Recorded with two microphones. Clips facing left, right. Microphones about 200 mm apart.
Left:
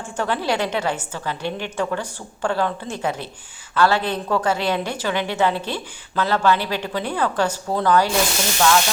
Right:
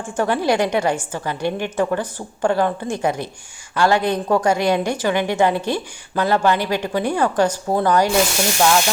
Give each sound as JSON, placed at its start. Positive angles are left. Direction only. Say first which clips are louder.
{"t": 0.0, "sound": "a woman's voice", "louder": "right 4 dB", "side_deg": -15}
{"t": 8.5, "sound": "frying", "louder": "right 1 dB", "side_deg": -25}